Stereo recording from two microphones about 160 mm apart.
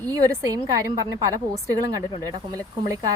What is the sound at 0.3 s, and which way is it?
A woman's voice, 20° right (ahead or behind).